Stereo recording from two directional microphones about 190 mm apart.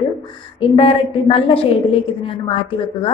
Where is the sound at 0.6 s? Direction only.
30° left (ahead or behind).